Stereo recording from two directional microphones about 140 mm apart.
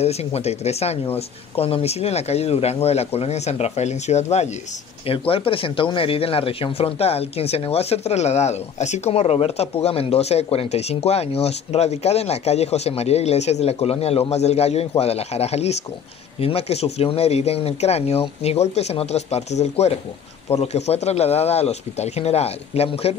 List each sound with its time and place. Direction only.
0.0 s speech: 50° left (ahead or behind)
5.0 s speech: 40° left (ahead or behind)